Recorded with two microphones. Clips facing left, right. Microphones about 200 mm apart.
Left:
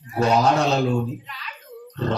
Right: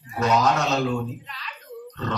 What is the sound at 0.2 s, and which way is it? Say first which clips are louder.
Speech: left 3 dB; 30° left (ahead or behind).